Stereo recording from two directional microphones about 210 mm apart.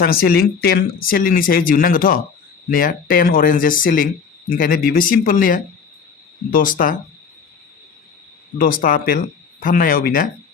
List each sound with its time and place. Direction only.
0.0 s speech: 45° left (ahead or behind)
8.5 s speech: 45° left (ahead or behind)